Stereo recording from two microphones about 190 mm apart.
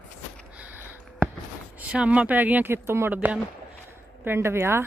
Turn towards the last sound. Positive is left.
turn(degrees=-15)  # may be behind; listen again after turning